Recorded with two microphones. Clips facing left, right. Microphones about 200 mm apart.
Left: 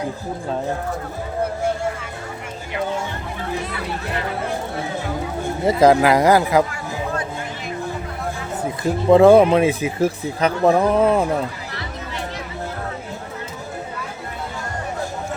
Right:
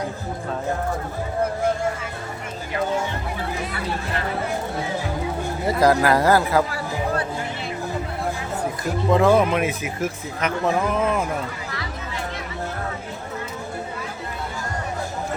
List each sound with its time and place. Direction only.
5.6 s speech: 20° left (ahead or behind)
9.0 s speech: 30° left (ahead or behind)